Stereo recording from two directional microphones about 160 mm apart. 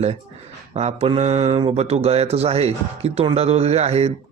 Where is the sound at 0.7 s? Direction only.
40° right (ahead or behind).